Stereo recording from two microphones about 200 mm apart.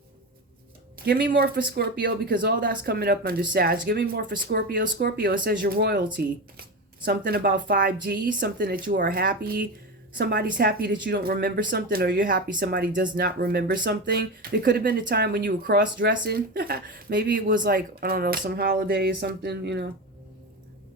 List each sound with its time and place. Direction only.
0.9 s speech: 50° right (ahead or behind)